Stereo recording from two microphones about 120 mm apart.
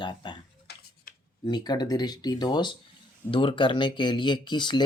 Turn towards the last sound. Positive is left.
turn(degrees=40)  # may be behind; listen again after turning